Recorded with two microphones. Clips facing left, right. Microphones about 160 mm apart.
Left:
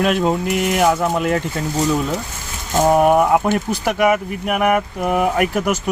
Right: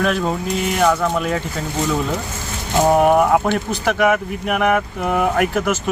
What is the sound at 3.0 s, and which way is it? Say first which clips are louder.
Speech: even; 5° left (ahead or behind).